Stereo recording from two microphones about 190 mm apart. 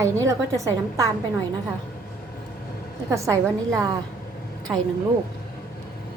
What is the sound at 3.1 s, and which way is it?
Speech, 15° right (ahead or behind).